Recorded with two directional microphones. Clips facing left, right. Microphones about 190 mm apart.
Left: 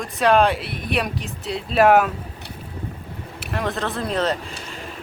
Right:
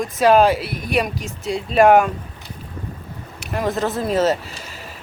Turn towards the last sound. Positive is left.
turn(degrees=-5)  # may be behind; listen again after turning